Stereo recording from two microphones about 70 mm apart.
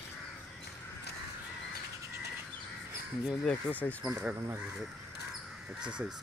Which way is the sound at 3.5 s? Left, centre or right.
Left.